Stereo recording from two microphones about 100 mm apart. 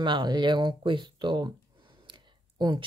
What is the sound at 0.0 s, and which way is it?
Speech, 50° right (ahead or behind).